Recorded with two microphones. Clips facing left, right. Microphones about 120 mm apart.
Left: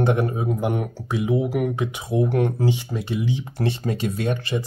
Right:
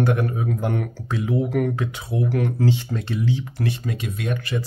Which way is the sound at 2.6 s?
15° left (ahead or behind).